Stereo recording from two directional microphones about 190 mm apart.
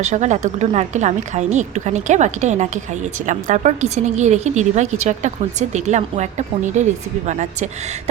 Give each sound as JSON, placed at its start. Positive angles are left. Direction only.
{"t": 0.0, "sound": "a woman's voice", "side_deg": -40}